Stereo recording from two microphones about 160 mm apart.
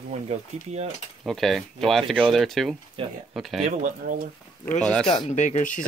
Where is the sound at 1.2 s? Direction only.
Centre (ahead or behind).